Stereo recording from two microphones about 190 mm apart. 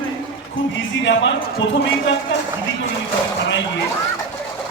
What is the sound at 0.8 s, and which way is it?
Speech, 75° left (ahead or behind).